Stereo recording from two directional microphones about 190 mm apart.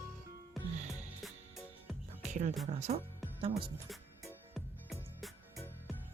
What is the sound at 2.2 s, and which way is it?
Music, 40° right (ahead or behind).